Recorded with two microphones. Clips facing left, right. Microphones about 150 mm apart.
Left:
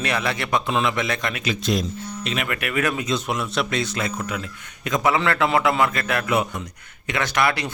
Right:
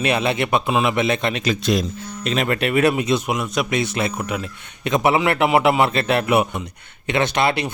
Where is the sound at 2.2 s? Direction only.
35° right (ahead or behind).